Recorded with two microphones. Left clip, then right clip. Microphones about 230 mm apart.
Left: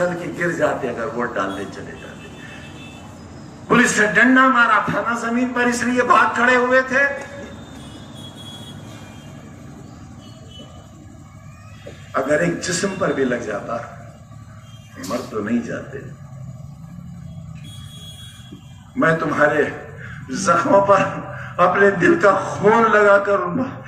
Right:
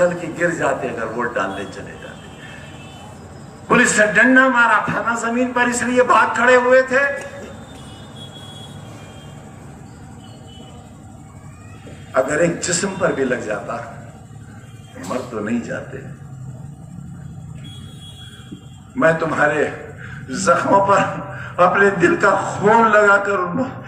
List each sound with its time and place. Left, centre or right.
0.0 s a man's voice: right
3.7 s a man's voice: right
12.1 s a man's voice: right
15.4 s a man's voice: right
18.9 s a man's voice: right